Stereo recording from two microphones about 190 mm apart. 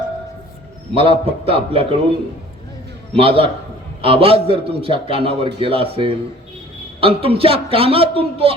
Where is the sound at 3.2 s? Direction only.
30° right (ahead or behind).